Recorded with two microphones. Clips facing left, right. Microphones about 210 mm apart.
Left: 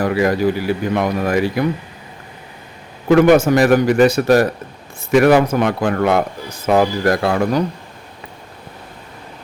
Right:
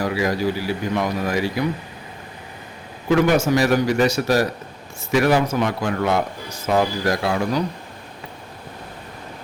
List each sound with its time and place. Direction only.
0.0 s a man's voice: 55° left (ahead or behind)
3.1 s a man's voice: 55° left (ahead or behind)